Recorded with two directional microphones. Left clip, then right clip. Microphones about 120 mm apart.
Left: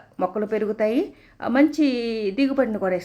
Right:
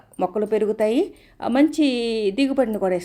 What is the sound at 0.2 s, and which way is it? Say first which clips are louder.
A woman's voice: right 3 dB; 40° right (ahead or behind).